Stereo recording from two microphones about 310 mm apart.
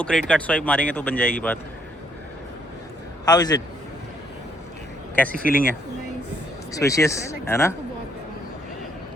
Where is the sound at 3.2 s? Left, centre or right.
Centre.